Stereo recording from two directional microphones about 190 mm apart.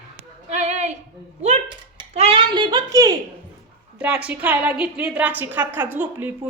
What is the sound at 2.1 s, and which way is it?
A woman's voice, 30° right (ahead or behind).